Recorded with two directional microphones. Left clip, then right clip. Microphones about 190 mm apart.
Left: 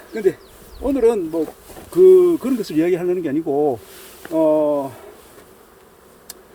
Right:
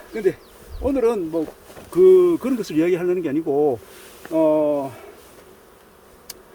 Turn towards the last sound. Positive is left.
turn(degrees=5)  # may be behind; listen again after turning